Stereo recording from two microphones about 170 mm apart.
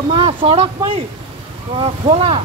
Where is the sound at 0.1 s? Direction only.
30° right (ahead or behind).